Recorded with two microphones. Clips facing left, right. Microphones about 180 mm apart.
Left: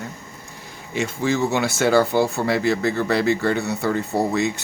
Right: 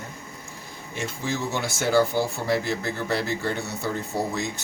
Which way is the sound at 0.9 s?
70° left (ahead or behind).